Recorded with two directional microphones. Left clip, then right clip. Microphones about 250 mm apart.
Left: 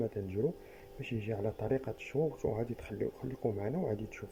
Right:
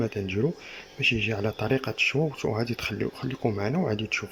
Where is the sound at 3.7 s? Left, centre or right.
Right.